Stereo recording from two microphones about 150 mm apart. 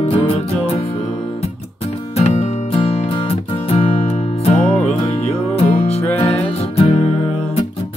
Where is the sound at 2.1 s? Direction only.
45° left (ahead or behind).